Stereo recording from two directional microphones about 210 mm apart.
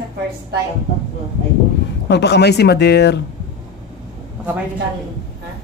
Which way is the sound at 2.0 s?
55° left (ahead or behind).